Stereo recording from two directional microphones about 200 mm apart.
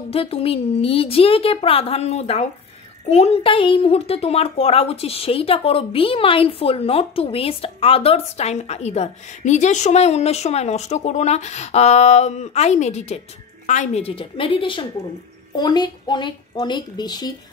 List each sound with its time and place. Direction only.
0.1 s a woman's voice: 30° left (ahead or behind)